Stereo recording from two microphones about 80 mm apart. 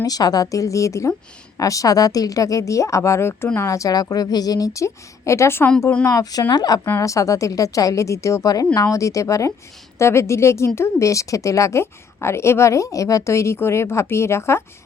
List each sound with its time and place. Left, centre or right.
0.0 s a woman's voice: left
6.5 s speech: left
6.8 s a woman's voice: left